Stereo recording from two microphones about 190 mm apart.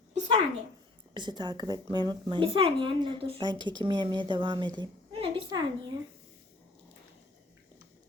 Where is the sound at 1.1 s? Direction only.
25° right (ahead or behind).